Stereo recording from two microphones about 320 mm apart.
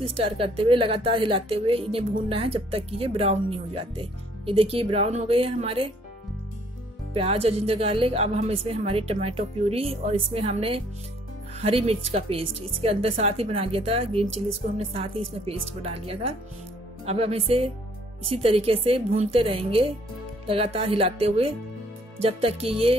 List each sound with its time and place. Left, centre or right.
0.0 s a woman's voice: centre
7.2 s a woman's voice: centre